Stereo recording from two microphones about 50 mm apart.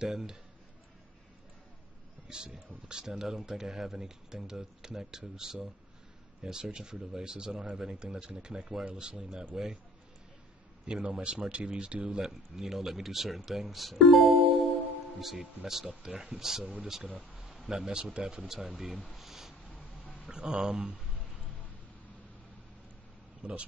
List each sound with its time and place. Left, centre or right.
0.0 s speech: centre
2.2 s speech: centre
10.9 s speech: centre
17.4 s a sound: centre
17.6 s speech: centre
19.7 s a sound: centre
20.2 s speech: centre
23.4 s speech: right